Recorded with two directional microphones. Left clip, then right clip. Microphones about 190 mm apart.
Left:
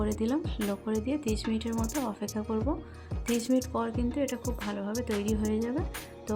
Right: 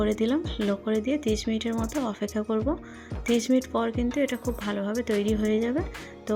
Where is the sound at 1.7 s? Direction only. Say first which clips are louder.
Right 3 dB; centre (ahead or behind).